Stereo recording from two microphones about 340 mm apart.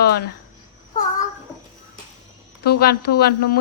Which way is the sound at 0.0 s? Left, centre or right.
Left.